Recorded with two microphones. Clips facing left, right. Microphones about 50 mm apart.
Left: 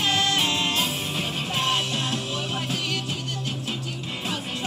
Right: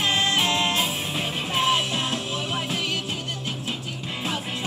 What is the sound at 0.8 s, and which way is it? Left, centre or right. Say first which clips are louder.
Music: right 1 dB; centre.